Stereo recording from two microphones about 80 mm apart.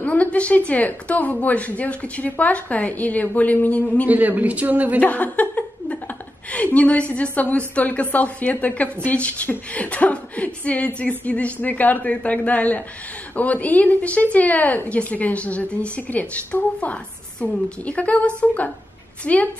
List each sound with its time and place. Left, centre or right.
0.0 s a woman's voice: centre
4.1 s a woman's voice: centre
5.0 s a woman's voice: centre